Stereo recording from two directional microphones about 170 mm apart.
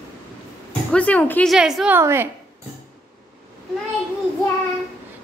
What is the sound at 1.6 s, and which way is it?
Speech, 5° right (ahead or behind).